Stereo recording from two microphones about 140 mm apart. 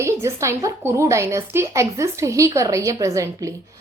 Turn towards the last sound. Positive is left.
turn(degrees=-20)  # may be behind; listen again after turning